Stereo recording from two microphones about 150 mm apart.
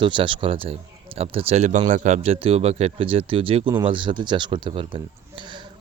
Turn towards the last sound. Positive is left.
turn(degrees=-30)  # may be behind; listen again after turning